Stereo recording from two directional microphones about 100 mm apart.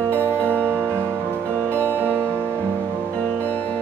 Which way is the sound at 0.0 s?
25° right (ahead or behind).